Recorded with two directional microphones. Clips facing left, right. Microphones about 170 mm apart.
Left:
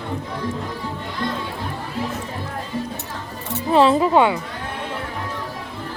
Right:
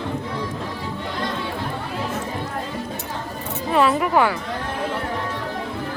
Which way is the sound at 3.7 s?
30° left (ahead or behind).